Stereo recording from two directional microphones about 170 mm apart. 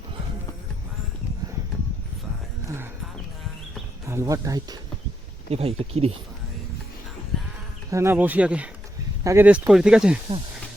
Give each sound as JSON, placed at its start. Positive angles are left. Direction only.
{"t": 4.0, "sound": "speech", "side_deg": -15}
{"t": 5.5, "sound": "speech", "side_deg": -35}
{"t": 7.9, "sound": "speech", "side_deg": -15}